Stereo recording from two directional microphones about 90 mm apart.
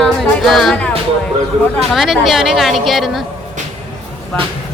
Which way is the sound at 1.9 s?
5° right (ahead or behind).